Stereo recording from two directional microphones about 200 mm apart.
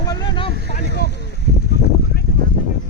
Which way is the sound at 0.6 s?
55° left (ahead or behind).